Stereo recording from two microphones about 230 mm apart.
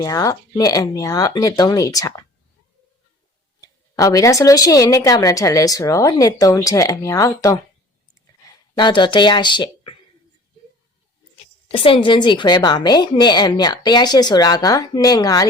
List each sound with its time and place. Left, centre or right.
0.0 s a woman's voice: centre
3.9 s a woman's voice: centre
11.7 s a woman's voice: left